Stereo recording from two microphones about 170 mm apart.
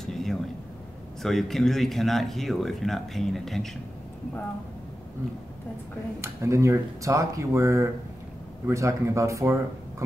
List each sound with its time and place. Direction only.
0.0 s a sound: centre (ahead or behind)
1.2 s speech: centre (ahead or behind)
6.2 s speech: 15° right (ahead or behind)